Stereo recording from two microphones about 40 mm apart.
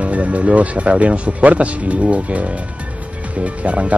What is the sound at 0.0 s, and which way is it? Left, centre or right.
Speech, right.